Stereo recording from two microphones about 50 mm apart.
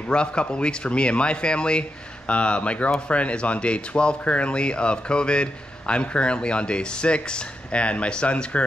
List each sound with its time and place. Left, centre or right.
0.1 s speech: centre